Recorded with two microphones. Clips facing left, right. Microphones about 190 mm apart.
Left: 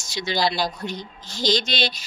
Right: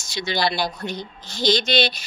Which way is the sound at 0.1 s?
60° right (ahead or behind).